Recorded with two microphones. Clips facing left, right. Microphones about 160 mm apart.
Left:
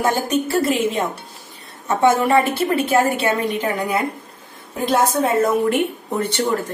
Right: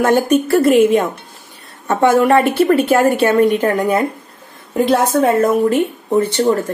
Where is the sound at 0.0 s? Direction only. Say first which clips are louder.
Right 6 dB; 60° right (ahead or behind).